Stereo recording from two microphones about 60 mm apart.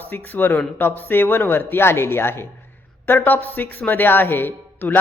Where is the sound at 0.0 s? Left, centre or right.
Left.